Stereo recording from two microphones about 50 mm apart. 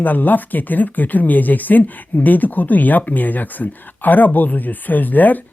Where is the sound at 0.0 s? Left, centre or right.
Left.